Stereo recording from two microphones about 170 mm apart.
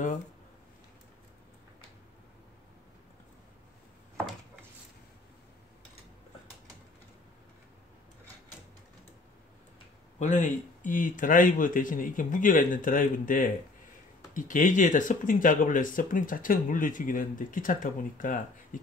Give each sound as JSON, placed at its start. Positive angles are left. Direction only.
{"t": 10.1, "sound": "speech", "side_deg": 45}